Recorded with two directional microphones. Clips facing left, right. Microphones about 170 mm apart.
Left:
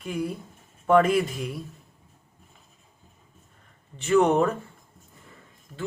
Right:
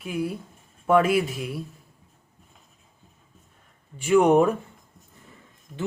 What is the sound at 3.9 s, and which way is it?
Speech, 10° right (ahead or behind).